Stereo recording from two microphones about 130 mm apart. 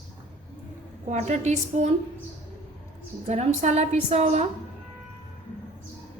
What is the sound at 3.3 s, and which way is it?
A woman's voice, 60° right (ahead or behind).